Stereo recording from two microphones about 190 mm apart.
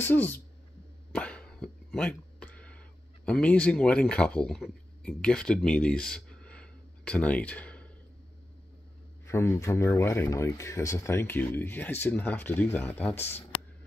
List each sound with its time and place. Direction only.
0.0 s speech: 10° left (ahead or behind)
1.1 s a sound: 5° left (ahead or behind)
3.3 s speech: 5° left (ahead or behind)
9.3 s speech: 15° left (ahead or behind)
13.2 s speech: 35° left (ahead or behind)